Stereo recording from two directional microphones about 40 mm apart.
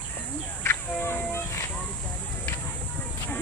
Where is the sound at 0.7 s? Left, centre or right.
Left.